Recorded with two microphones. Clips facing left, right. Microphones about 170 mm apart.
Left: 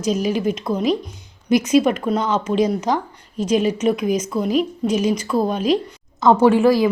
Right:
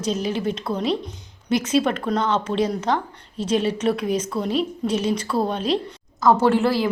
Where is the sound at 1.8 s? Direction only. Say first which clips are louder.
Left 3 dB; 10° left (ahead or behind).